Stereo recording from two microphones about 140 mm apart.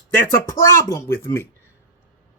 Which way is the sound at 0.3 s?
20° left (ahead or behind).